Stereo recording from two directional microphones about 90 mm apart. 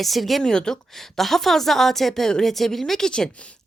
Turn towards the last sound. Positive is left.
turn(degrees=5)  # may be behind; listen again after turning